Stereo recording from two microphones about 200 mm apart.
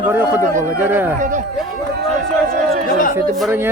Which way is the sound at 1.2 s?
40° right (ahead or behind).